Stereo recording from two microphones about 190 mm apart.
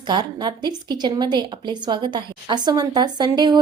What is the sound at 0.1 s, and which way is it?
A woman's voice, 25° right (ahead or behind).